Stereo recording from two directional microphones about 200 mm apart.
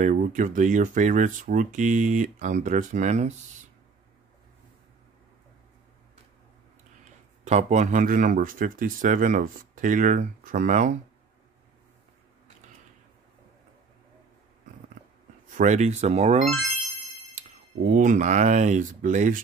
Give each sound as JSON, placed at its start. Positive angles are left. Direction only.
{"t": 0.0, "sound": "speech", "side_deg": -40}
{"t": 7.4, "sound": "speech", "side_deg": -35}
{"t": 15.5, "sound": "speech", "side_deg": -35}